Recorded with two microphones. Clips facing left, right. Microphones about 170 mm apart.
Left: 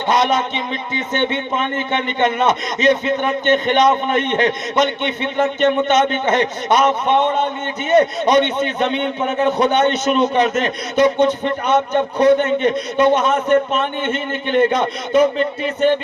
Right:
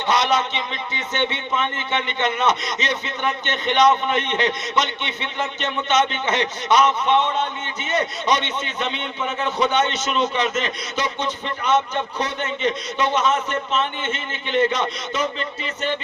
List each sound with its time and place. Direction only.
0.1 s a man's voice: 50° left (ahead or behind)